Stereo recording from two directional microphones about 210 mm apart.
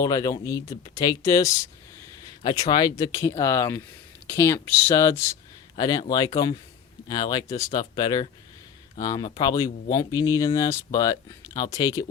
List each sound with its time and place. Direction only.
0.0 s speech: 15° left (ahead or behind)